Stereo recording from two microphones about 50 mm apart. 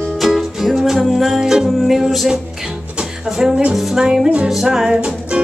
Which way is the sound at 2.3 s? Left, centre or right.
Centre.